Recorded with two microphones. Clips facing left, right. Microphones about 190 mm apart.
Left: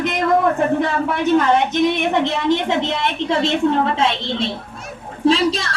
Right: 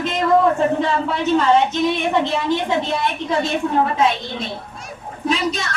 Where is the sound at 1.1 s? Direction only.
55° left (ahead or behind).